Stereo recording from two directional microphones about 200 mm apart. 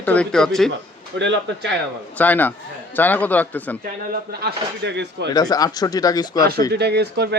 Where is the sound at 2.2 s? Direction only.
10° left (ahead or behind).